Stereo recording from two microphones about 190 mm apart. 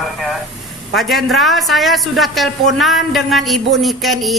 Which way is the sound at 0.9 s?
Centre (ahead or behind).